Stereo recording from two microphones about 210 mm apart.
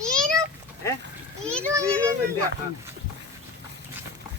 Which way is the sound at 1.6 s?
15° right (ahead or behind).